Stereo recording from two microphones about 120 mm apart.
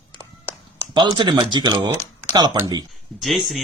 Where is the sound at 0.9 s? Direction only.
40° right (ahead or behind).